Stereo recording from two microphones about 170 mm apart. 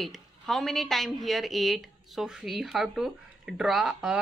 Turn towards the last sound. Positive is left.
turn(degrees=-5)  # may be behind; listen again after turning